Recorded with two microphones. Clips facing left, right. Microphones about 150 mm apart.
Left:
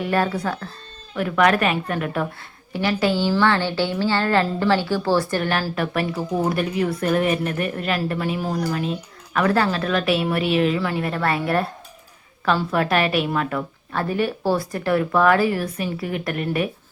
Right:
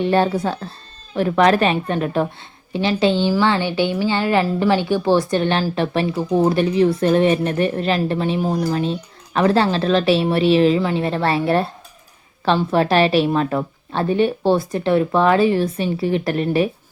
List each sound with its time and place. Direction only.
0.0 s a woman's voice: 25° right (ahead or behind)